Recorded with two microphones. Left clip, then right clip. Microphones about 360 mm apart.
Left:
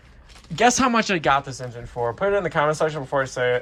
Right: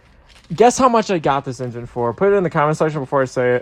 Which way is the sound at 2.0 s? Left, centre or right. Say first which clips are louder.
Right 4 dB; right.